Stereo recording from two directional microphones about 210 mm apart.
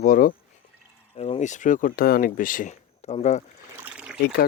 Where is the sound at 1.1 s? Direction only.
30° left (ahead or behind).